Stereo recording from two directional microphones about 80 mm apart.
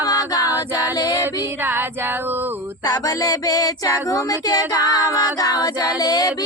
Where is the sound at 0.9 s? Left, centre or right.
Left.